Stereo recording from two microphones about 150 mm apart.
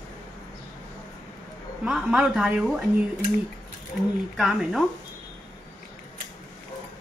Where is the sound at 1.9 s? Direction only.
5° right (ahead or behind).